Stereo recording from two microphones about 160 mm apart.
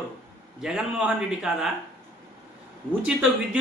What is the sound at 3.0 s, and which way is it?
Speech, 5° right (ahead or behind).